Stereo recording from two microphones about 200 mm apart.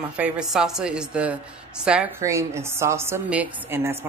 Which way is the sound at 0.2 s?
5° right (ahead or behind).